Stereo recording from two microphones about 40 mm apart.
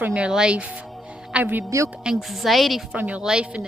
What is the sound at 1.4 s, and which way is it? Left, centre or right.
Speech, right.